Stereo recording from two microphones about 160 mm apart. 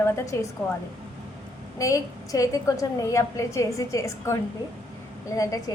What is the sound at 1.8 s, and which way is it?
A woman's voice, 20° left (ahead or behind).